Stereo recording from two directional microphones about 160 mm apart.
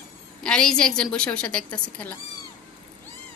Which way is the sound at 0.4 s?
5° left (ahead or behind).